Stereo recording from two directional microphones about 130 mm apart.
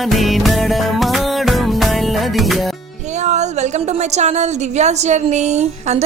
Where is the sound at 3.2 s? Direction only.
65° right (ahead or behind).